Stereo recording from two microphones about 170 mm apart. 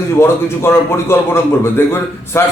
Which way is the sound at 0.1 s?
15° left (ahead or behind).